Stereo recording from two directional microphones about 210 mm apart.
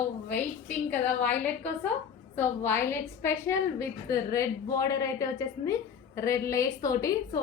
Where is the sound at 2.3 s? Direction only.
10° left (ahead or behind).